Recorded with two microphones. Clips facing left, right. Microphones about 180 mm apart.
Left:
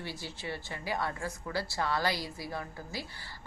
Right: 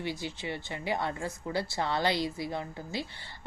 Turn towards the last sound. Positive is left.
turn(degrees=-20)  # may be behind; listen again after turning